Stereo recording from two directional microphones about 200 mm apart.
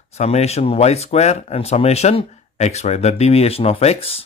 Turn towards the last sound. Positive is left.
turn(degrees=30)  # may be behind; listen again after turning